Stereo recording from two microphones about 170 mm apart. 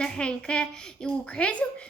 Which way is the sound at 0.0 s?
5° left (ahead or behind).